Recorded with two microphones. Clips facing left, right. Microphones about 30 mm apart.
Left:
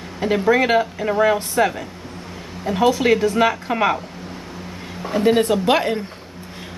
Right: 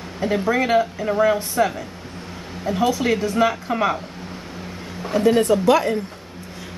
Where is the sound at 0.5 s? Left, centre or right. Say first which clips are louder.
Left 3 dB; centre.